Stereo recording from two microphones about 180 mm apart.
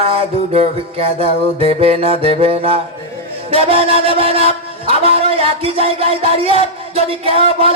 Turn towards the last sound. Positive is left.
turn(degrees=-30)  # may be behind; listen again after turning